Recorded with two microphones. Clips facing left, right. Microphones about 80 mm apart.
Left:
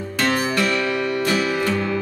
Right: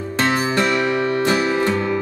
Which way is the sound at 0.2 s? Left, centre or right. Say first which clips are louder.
Right 2 dB; right.